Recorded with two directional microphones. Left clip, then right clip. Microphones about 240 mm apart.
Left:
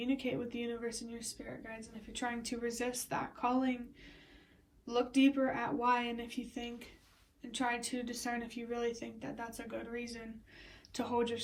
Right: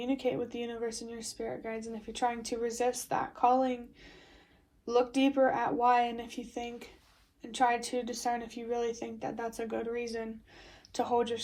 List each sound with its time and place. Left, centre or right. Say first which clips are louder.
0.0 s speech: right 5 dB; centre